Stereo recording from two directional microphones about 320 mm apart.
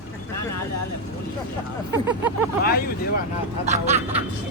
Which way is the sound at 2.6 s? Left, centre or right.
Left.